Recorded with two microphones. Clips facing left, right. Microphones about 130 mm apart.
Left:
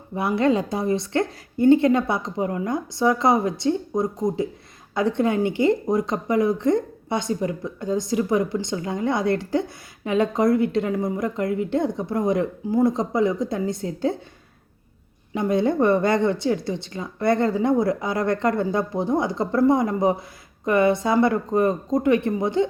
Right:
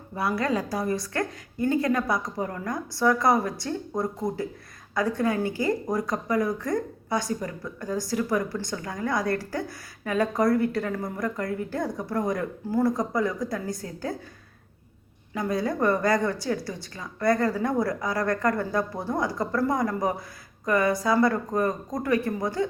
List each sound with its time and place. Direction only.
0.2 s a woman's voice: 25° left (ahead or behind)
15.4 s a woman's voice: 25° left (ahead or behind)